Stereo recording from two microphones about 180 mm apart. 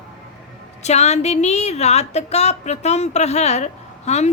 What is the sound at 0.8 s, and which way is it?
A woman's voice, 40° left (ahead or behind).